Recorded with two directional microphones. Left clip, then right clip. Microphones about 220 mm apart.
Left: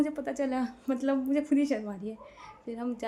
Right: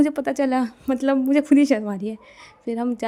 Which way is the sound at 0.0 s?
45° right (ahead or behind).